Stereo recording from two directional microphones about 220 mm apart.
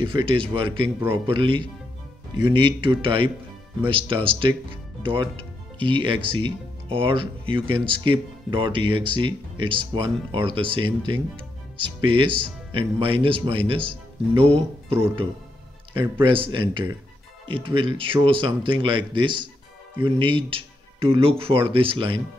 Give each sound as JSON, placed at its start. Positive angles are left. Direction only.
{"t": 0.0, "sound": "speech", "side_deg": -25}
{"t": 16.2, "sound": "speech", "side_deg": -25}